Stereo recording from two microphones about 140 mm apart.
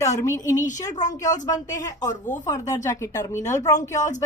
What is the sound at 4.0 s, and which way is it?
Speech, 60° left (ahead or behind).